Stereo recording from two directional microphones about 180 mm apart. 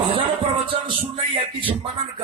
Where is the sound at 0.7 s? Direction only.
30° right (ahead or behind).